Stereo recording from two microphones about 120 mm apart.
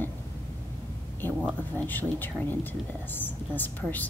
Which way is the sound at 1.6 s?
15° left (ahead or behind).